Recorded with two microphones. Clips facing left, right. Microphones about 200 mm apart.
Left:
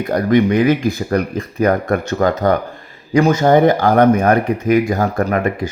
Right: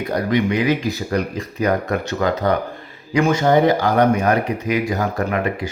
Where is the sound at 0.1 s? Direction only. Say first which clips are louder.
Left 6 dB; 50° left (ahead or behind).